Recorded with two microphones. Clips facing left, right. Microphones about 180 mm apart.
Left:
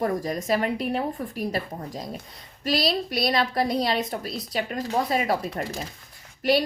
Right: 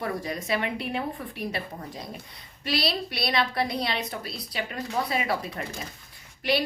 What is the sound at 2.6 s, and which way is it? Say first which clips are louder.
A woman's voice: left 4 dB; 40° left (ahead or behind).